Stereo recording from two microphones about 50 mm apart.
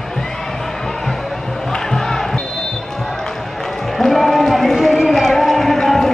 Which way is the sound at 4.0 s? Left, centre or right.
Centre.